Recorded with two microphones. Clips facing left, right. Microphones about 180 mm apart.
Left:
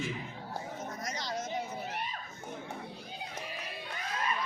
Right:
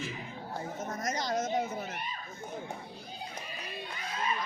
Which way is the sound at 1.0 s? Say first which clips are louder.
Right 7 dB; 45° right (ahead or behind).